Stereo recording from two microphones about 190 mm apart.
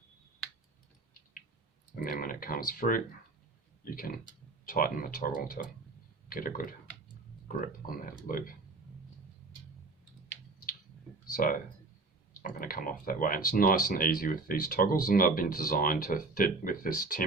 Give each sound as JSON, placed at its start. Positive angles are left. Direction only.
{"t": 2.0, "sound": "speech", "side_deg": 45}
{"t": 11.3, "sound": "speech", "side_deg": 45}